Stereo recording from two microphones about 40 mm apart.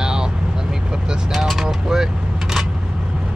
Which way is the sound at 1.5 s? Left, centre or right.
Centre.